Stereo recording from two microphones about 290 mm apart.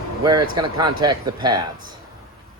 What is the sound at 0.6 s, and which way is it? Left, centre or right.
Speech, centre.